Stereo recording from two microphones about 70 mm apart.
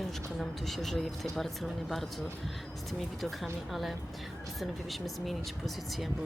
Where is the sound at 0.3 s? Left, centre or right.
Centre.